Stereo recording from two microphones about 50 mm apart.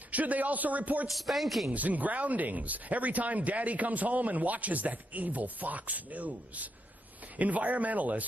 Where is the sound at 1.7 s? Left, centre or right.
Right.